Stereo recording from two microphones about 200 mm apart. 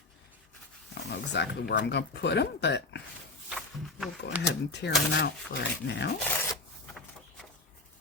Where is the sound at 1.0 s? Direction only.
55° left (ahead or behind).